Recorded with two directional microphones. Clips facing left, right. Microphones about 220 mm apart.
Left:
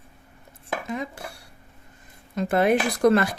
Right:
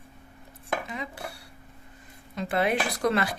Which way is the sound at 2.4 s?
45° left (ahead or behind).